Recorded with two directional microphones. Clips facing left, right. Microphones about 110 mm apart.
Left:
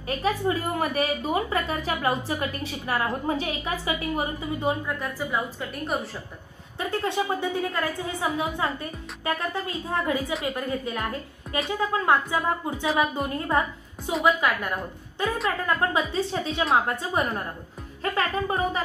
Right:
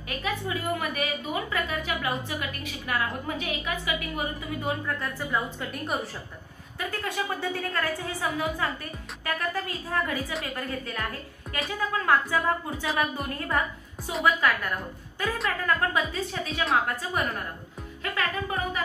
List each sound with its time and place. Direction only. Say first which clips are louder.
0.2 s a woman's voice: left 5 dB; 35° left (ahead or behind)
4.8 s a woman's voice: left 2 dB; 5° left (ahead or behind)
6.8 s a woman's voice: left 5 dB; 25° left (ahead or behind)
13.5 s music: left 1 dB; 20° left (ahead or behind)
14.2 s a woman's voice: left 1 dB; 15° left (ahead or behind)